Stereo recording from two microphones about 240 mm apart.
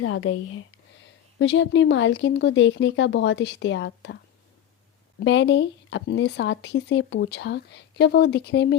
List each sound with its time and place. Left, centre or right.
0.0 s speech: left
1.4 s speech: left
5.2 s speech: left